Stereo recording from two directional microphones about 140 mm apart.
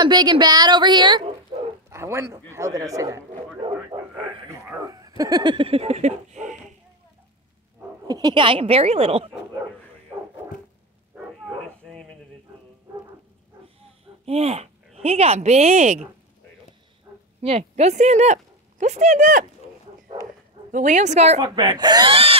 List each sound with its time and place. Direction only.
0.0 s a woman's voice: 30° right (ahead or behind)
1.5 s a sound: 40° right (ahead or behind)
1.9 s speech: 20° right (ahead or behind)
4.5 s speech: 25° right (ahead or behind); by 6.5 s 55° right (ahead or behind)
8.1 s speech: 30° right (ahead or behind)
11.8 s a sound: centre (ahead or behind)
14.2 s speech: 45° right (ahead or behind)
17.4 s speech: 45° right (ahead or behind); by 19.4 s 65° right (ahead or behind)
20.7 s a woman's voice: 60° right (ahead or behind)
21.4 s a woman's voice: 30° right (ahead or behind)